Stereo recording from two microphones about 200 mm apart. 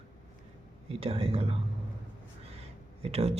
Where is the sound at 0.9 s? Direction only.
30° right (ahead or behind).